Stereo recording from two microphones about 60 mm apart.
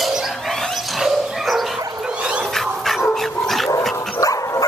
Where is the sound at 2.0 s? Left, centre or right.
Centre.